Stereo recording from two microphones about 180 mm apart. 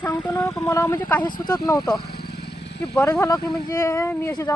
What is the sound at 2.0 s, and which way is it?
Vehicle, 65° left (ahead or behind).